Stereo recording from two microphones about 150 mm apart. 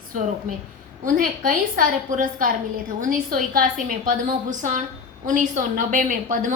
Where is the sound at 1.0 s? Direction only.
70° right (ahead or behind).